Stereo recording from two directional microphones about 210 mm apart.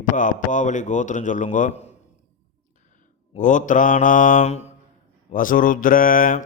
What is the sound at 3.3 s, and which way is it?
A man's voice, 35° left (ahead or behind).